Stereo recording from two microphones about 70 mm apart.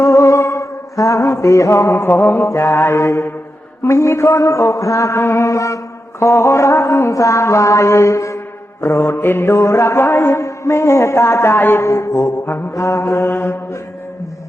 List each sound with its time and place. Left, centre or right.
0.0 s music: left
2.5 s mantra: left
3.8 s a sound: left
8.8 s mantra: left